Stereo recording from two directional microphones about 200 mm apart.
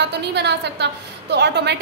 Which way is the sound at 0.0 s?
60° right (ahead or behind).